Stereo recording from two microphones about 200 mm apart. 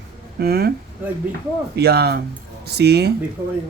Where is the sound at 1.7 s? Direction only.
55° right (ahead or behind).